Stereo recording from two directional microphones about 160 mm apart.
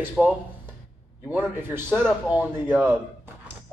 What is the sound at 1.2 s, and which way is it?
A man's voice, 10° right (ahead or behind).